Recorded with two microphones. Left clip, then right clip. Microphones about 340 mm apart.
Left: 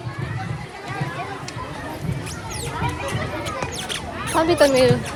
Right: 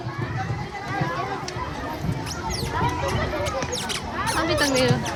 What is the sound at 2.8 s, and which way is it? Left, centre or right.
Music, right.